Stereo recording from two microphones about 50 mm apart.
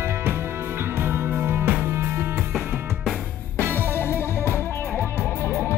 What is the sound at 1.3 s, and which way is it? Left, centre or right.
Music, right.